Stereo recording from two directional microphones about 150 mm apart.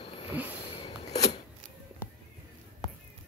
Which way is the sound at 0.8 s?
45° left (ahead or behind).